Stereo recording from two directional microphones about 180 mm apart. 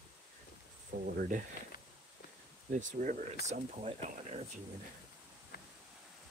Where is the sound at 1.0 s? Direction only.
55° right (ahead or behind).